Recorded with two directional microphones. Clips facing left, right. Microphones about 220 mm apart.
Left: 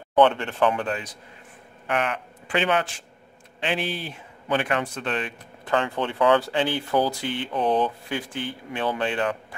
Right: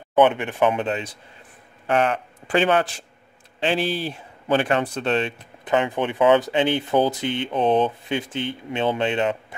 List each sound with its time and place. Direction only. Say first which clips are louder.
0.1 s a man's voice: right 1 dB; 15° right (ahead or behind)